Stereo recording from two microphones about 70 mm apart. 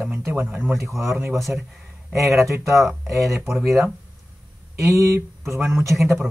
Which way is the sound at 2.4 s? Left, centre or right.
Right.